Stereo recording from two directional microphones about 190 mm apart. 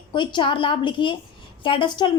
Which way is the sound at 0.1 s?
25° left (ahead or behind).